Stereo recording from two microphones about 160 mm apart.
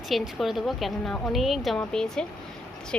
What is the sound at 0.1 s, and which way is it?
A woman's voice, centre (ahead or behind).